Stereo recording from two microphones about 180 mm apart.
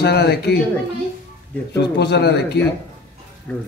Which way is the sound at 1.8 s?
70° left (ahead or behind).